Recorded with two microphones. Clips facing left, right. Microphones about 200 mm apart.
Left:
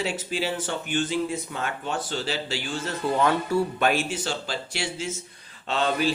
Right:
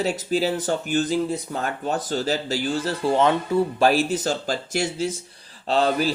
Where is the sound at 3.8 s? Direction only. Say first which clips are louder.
Right 5 dB; 35° right (ahead or behind).